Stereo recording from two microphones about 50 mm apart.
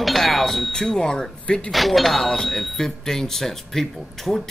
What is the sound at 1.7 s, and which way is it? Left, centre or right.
Speech, centre.